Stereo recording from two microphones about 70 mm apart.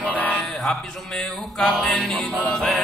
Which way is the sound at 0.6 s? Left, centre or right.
Centre.